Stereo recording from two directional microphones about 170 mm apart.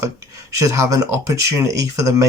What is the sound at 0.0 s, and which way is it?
Speech, 20° right (ahead or behind).